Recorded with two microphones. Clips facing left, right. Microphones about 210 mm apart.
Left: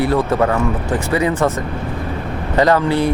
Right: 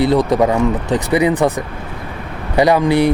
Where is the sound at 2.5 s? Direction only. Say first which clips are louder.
Right 2 dB; 15° right (ahead or behind).